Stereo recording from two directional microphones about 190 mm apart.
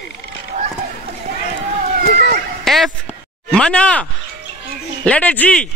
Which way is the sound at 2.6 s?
Centre (ahead or behind).